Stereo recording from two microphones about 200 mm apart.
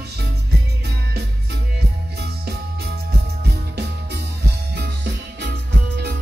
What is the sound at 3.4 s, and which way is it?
Music, 55° right (ahead or behind).